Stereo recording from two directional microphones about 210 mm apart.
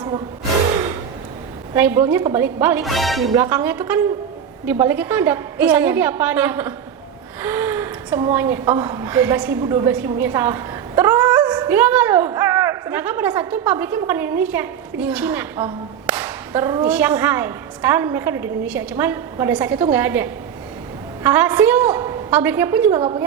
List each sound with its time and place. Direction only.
1.7 s a woman's voice: 10° right (ahead or behind)
3.3 s a woman's voice: 15° right (ahead or behind)
23.0 s a woman's voice: 25° right (ahead or behind)